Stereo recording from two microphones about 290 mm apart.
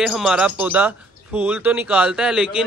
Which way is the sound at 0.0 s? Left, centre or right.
Centre.